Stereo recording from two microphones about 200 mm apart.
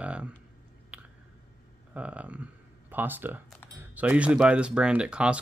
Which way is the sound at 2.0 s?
5° right (ahead or behind).